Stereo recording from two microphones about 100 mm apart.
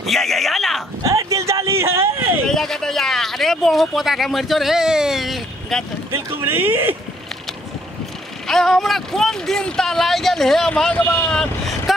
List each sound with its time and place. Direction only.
0.1 s a sound: centre (ahead or behind)
1.0 s a sound: 30° right (ahead or behind)
2.4 s speech: 5° left (ahead or behind)
6.4 s speech: 20° right (ahead or behind)
8.5 s speech: 5° left (ahead or behind); by 11.2 s 20° left (ahead or behind)
11.2 s speech: 5° left (ahead or behind)